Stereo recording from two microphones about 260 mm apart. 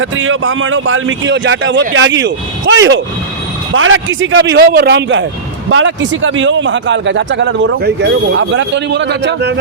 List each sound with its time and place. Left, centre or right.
0.0 s a man's voice: right